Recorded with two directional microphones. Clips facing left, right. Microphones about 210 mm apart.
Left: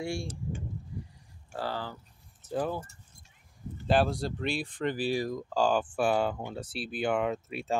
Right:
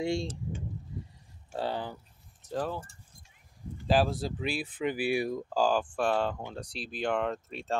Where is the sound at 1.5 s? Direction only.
20° right (ahead or behind).